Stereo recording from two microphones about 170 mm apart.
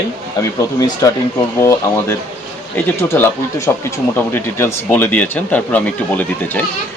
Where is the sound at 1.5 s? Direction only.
15° left (ahead or behind).